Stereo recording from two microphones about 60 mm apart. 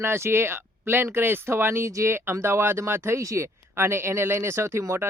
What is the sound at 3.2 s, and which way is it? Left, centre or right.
Speech, right.